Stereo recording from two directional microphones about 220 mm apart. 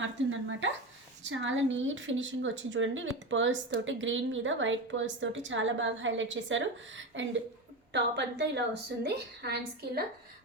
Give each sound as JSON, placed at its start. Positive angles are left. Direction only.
{"t": 0.0, "sound": "a woman's voice", "side_deg": -60}